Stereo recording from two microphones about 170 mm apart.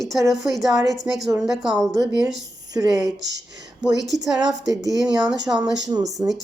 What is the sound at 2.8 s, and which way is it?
Speech, 20° right (ahead or behind).